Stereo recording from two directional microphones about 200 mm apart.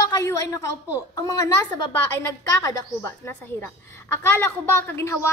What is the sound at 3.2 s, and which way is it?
A woman's voice, 10° left (ahead or behind).